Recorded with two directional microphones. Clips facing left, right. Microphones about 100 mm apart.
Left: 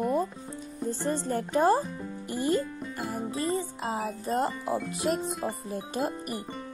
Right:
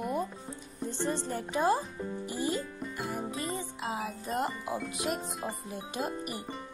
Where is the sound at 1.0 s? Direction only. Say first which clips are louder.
Left 3 dB; 45° left (ahead or behind).